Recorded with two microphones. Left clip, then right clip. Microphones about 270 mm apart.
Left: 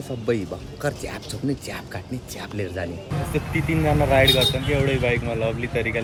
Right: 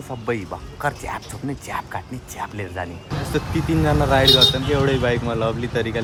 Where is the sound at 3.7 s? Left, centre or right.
Centre.